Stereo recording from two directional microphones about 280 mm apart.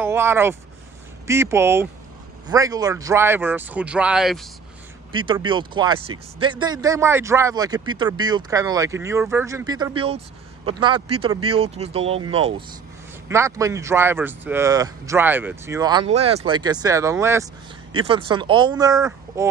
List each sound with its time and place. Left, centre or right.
0.0 s speech: centre
5.1 s speech: centre
13.3 s speech: centre